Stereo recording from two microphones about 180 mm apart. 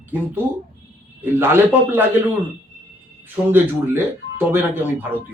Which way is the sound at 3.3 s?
10° right (ahead or behind).